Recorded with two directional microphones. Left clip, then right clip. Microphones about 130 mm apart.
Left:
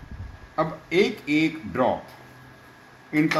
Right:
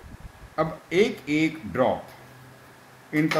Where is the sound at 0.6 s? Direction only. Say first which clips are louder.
Even; 45° right (ahead or behind).